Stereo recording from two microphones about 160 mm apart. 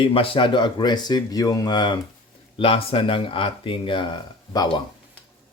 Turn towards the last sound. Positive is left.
turn(degrees=25)  # may be behind; listen again after turning